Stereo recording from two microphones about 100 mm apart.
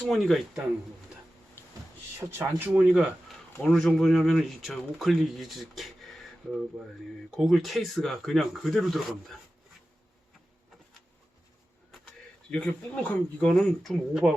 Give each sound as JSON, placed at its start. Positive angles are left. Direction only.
{"t": 0.0, "sound": "speech", "side_deg": 0}
{"t": 2.2, "sound": "speech", "side_deg": -15}
{"t": 3.6, "sound": "speech", "side_deg": 5}
{"t": 12.5, "sound": "speech", "side_deg": 10}
{"t": 14.1, "sound": "speech", "side_deg": -5}